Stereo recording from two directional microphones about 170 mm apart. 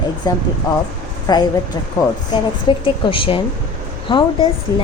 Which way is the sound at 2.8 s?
30° left (ahead or behind).